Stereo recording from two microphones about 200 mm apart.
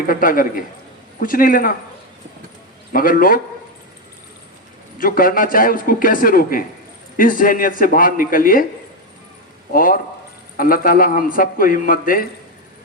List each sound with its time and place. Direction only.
0.1 s speech: 45° left (ahead or behind)
2.9 s speech: 45° left (ahead or behind)
4.9 s speech: 45° left (ahead or behind)
9.7 s speech: 45° left (ahead or behind)